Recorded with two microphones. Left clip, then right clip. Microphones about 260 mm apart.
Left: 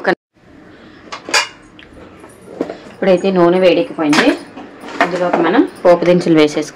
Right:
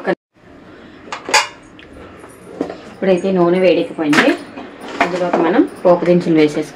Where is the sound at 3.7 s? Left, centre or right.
Centre.